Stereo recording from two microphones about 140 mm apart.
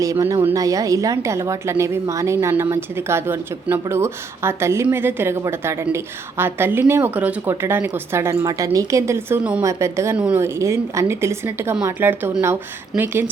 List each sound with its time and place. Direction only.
0.0 s a woman's voice: 25° right (ahead or behind)
9.6 s speech: 20° right (ahead or behind)
10.2 s a woman's voice: 10° right (ahead or behind)
10.4 s a woman's voice: 20° right (ahead or behind)